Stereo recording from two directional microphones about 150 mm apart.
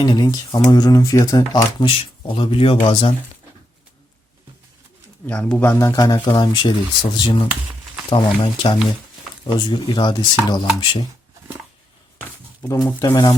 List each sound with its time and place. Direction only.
0.0 s speech: 25° left (ahead or behind)
1.8 s speech: 35° left (ahead or behind)
5.2 s speech: 10° left (ahead or behind)
5.9 s speech: 25° left (ahead or behind)
12.6 s speech: 25° left (ahead or behind)